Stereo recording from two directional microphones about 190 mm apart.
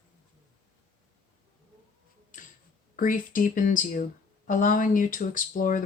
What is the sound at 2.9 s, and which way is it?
Speech, 45° left (ahead or behind).